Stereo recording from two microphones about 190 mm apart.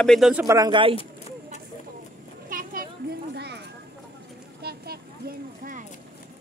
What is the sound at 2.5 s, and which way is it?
Children playing, 45° right (ahead or behind).